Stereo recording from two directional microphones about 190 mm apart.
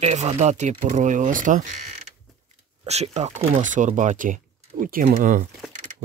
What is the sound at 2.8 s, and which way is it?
Speech, 35° right (ahead or behind).